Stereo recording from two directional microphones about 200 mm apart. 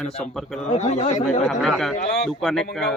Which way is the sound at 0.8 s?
35° left (ahead or behind).